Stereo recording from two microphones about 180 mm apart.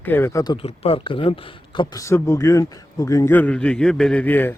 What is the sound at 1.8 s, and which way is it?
A man's voice, 15° left (ahead or behind).